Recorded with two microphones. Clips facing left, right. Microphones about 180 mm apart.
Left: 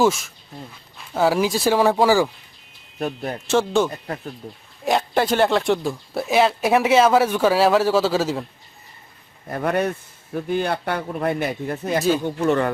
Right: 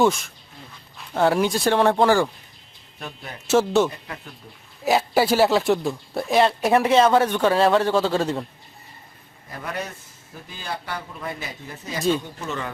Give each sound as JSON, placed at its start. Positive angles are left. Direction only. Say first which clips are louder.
{"t": 0.0, "sound": "speech", "louder": "left 1 dB", "side_deg": 0}
{"t": 3.0, "sound": "speech", "louder": "left 11 dB", "side_deg": 50}
{"t": 3.4, "sound": "speech", "louder": "right 1 dB", "side_deg": -5}
{"t": 4.4, "sound": "speech", "louder": "left 9 dB", "side_deg": 45}
{"t": 4.9, "sound": "speech", "louder": "right 1 dB", "side_deg": -5}
{"t": 9.5, "sound": "speech", "louder": "left 10 dB", "side_deg": 55}